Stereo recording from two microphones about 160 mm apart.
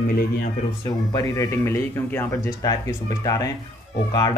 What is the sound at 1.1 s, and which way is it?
Speech, 20° left (ahead or behind).